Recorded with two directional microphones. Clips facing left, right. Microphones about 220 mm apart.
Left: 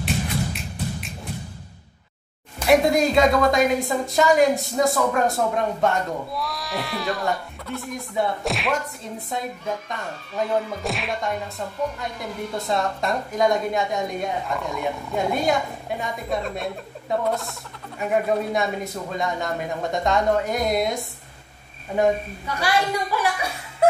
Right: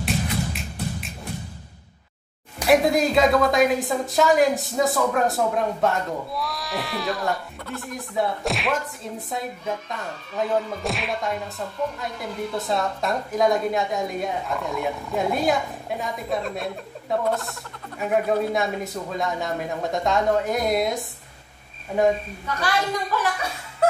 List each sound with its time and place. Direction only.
0.0 s music: centre (ahead or behind)
2.7 s speech: centre (ahead or behind)
22.5 s a woman's voice: 10° left (ahead or behind)